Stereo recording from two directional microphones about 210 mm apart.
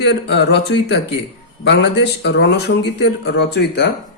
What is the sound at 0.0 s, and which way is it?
Speech, 55° left (ahead or behind).